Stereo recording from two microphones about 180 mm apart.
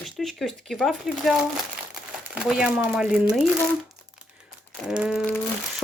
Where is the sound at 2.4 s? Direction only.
5° right (ahead or behind).